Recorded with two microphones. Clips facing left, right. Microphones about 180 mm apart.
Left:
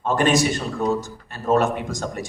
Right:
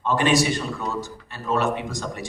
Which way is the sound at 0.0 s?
45° left (ahead or behind).